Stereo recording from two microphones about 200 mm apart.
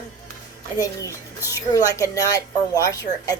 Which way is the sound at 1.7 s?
15° left (ahead or behind).